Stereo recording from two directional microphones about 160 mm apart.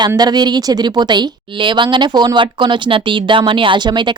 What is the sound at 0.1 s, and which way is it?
A woman's voice, 25° right (ahead or behind).